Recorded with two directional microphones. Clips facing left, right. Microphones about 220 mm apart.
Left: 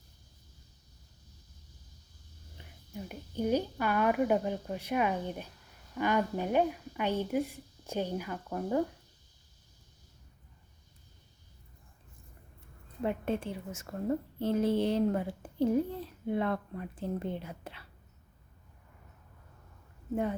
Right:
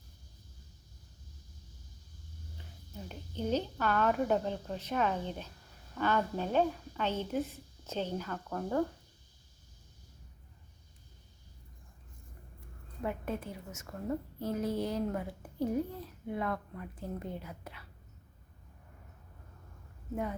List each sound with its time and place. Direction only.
2.6 s a woman's voice: 10° left (ahead or behind)
13.0 s a woman's voice: 25° left (ahead or behind)